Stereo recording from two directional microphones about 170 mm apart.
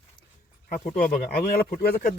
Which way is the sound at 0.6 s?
50° left (ahead or behind).